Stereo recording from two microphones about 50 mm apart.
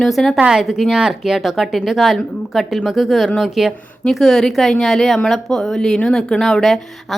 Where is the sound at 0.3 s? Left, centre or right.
Centre.